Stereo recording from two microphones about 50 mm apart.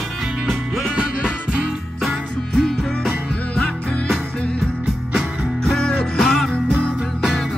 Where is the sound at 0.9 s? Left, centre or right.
Centre.